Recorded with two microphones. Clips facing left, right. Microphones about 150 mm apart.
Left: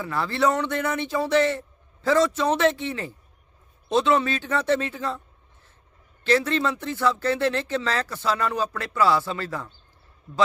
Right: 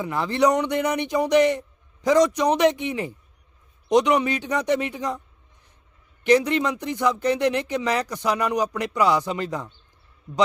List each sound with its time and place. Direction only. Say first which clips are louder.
0.0 s speech: right 3 dB; 20° right (ahead or behind)
6.2 s speech: right 3 dB; 15° right (ahead or behind)